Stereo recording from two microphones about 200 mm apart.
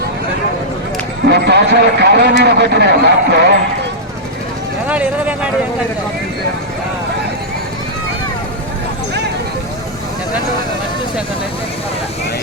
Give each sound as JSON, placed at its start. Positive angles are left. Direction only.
{"t": 1.3, "sound": "a man's voice", "side_deg": -55}
{"t": 4.9, "sound": "speech", "side_deg": -5}